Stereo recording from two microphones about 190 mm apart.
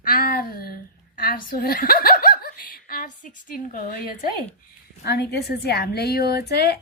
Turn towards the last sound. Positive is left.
turn(degrees=55)  # may be behind; listen again after turning